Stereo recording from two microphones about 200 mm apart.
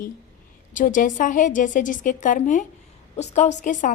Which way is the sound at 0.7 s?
40° left (ahead or behind).